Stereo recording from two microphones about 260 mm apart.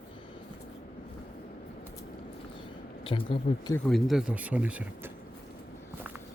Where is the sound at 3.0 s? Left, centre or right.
Left.